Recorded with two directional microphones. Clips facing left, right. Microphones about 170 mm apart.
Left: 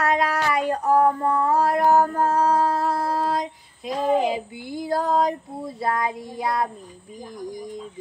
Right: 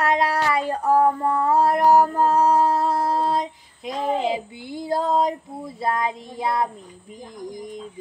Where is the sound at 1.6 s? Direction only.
20° right (ahead or behind).